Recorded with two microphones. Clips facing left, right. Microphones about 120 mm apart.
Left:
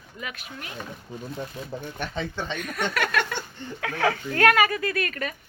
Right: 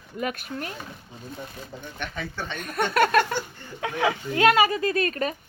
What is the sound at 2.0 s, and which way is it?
Speech, 25° left (ahead or behind).